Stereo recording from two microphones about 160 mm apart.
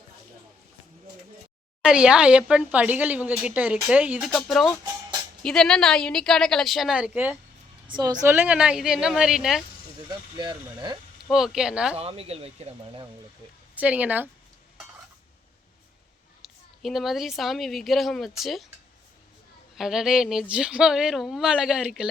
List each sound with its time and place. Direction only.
1.8 s a woman's voice: 5° right (ahead or behind)
7.9 s speech: 25° right (ahead or behind)
8.3 s a woman's voice: 10° right (ahead or behind)
10.1 s speech: 25° right (ahead or behind)
11.3 s a woman's voice: 5° right (ahead or behind)
11.9 s speech: 40° right (ahead or behind)
13.7 s speech: 10° right (ahead or behind)
16.4 s a woman's voice: centre (ahead or behind)
19.7 s a woman's voice: centre (ahead or behind)